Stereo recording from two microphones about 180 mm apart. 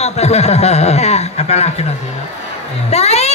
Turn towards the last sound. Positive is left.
turn(degrees=35)  # may be behind; listen again after turning